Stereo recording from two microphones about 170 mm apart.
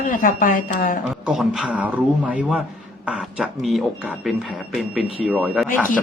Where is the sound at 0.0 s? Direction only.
50° left (ahead or behind).